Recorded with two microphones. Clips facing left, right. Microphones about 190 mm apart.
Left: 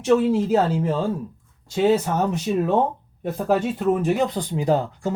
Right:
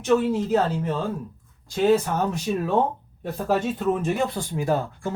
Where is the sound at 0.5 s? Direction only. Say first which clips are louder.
Left 3 dB; 30° left (ahead or behind).